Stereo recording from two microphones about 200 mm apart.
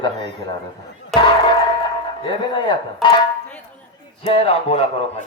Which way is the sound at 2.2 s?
25° left (ahead or behind).